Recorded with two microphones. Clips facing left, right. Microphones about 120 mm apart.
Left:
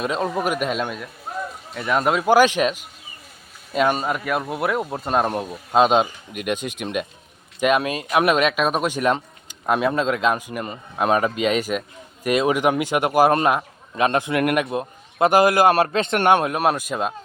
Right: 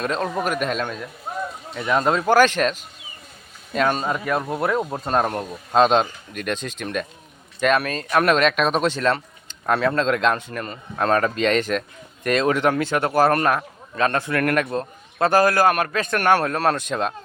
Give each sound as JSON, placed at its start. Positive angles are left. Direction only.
{"t": 0.0, "sound": "speech", "side_deg": 5}